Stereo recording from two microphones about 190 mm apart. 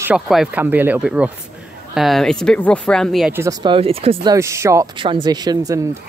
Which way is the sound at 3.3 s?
20° right (ahead or behind).